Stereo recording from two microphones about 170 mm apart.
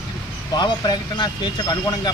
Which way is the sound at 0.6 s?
25° left (ahead or behind).